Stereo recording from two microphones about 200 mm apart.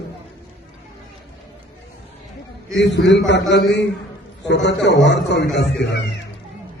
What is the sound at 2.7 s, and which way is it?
A man's voice, 60° left (ahead or behind).